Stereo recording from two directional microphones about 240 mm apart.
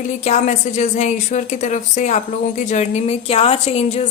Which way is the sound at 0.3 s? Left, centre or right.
Left.